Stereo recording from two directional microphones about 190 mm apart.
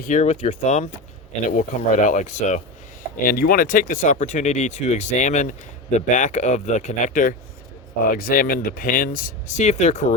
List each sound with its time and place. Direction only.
0.0 s speech: 40° left (ahead or behind)